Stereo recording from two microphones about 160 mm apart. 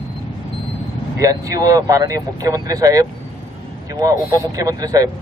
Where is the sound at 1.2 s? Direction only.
20° right (ahead or behind).